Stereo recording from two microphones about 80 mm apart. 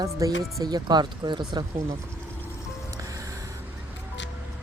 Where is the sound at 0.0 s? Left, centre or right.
Right.